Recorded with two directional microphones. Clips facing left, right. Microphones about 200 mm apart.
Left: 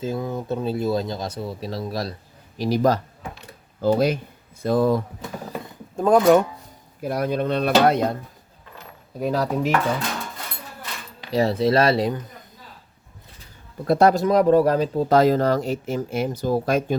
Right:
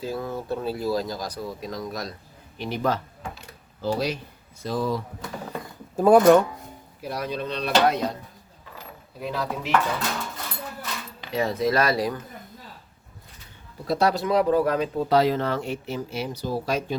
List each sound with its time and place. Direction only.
0.0 s speech: 20° left (ahead or behind); by 3.0 s 40° left (ahead or behind)
3.8 s speech: 50° left (ahead or behind)
6.0 s speech: 5° right (ahead or behind)
7.0 s speech: 55° left (ahead or behind)
9.2 s speech: 45° left (ahead or behind)
11.3 s speech: 35° left (ahead or behind)
13.8 s speech: 50° left (ahead or behind)